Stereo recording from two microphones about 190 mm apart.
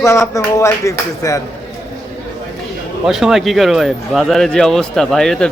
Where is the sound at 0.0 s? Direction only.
15° left (ahead or behind).